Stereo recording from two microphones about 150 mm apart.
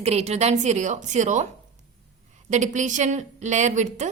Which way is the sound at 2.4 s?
55° right (ahead or behind).